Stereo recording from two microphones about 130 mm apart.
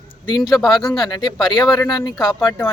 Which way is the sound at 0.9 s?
35° left (ahead or behind).